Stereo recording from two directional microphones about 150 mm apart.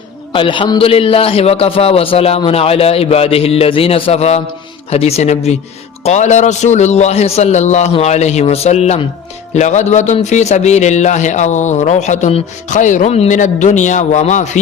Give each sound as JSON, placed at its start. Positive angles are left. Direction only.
{"t": 0.3, "sound": "a man's voice", "side_deg": 35}